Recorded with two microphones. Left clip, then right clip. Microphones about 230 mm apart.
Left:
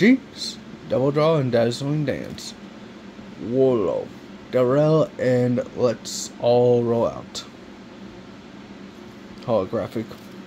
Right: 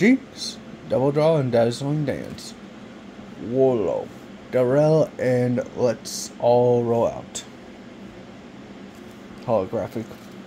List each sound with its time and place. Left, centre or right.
0.0 s speech: centre
3.5 s speech: centre
6.8 s speech: centre
9.5 s speech: centre